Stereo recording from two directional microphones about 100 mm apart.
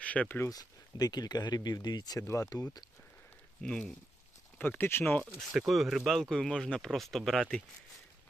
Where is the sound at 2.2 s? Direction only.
30° left (ahead or behind).